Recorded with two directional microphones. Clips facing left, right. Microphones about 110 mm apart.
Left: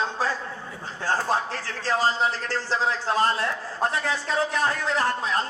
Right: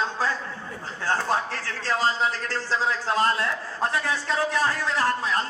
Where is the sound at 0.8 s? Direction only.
25° left (ahead or behind).